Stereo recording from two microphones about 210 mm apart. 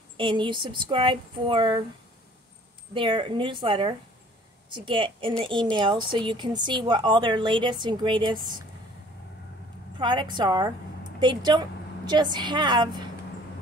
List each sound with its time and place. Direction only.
0.2 s a woman's voice: 20° right (ahead or behind)
2.9 s a woman's voice: 25° right (ahead or behind)
9.9 s a woman's voice: 20° right (ahead or behind)